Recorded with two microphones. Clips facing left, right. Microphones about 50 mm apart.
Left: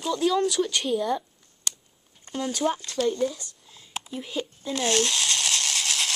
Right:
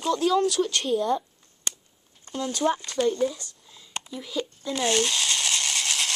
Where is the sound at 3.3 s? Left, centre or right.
Centre.